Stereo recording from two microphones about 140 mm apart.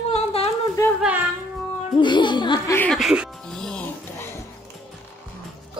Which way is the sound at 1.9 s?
35° left (ahead or behind).